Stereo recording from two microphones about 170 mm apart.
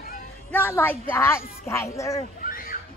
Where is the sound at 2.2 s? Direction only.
55° left (ahead or behind).